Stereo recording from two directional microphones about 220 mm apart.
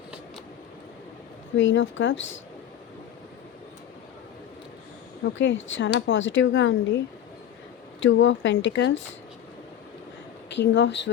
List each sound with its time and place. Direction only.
1.5 s speech: 60° left (ahead or behind)
5.2 s speech: 55° left (ahead or behind)
8.0 s speech: 60° left (ahead or behind)
10.5 s speech: 55° left (ahead or behind)